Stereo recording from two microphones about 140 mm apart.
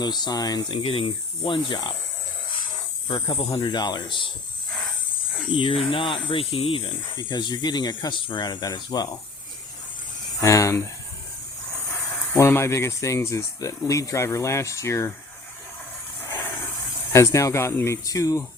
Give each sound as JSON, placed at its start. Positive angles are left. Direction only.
{"t": 0.0, "sound": "speech", "side_deg": 30}
{"t": 3.1, "sound": "speech", "side_deg": 35}
{"t": 5.5, "sound": "speech", "side_deg": 40}
{"t": 10.4, "sound": "speech", "side_deg": 20}
{"t": 12.3, "sound": "speech", "side_deg": 15}
{"t": 17.1, "sound": "speech", "side_deg": 20}